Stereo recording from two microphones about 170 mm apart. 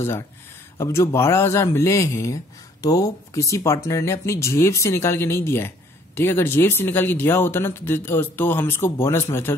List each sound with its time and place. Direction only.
0.7 s speech: 15° left (ahead or behind)